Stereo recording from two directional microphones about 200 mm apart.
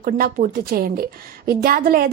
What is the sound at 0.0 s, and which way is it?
A woman's voice, 45° right (ahead or behind).